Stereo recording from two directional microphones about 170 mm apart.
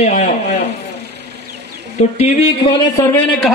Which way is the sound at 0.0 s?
40° left (ahead or behind).